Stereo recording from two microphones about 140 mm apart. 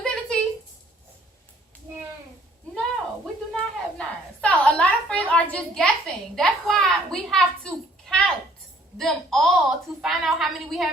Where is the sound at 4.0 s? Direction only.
10° left (ahead or behind).